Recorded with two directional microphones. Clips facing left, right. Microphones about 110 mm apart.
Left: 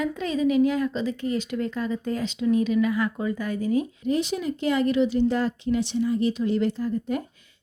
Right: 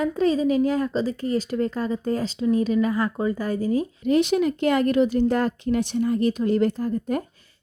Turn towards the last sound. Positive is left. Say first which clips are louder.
# right 2 dB
turn(degrees=-45)  # may be behind; listen again after turning